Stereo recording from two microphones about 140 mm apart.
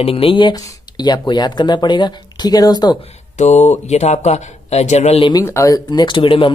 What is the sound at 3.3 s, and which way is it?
Speech, 55° left (ahead or behind).